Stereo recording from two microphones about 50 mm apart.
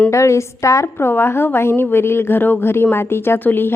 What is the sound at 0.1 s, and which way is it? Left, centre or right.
Speech, left.